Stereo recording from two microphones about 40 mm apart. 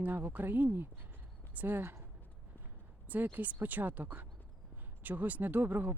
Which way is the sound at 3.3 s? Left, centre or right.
Right.